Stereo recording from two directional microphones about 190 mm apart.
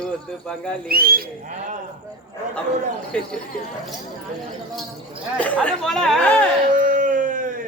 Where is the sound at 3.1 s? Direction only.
5° left (ahead or behind).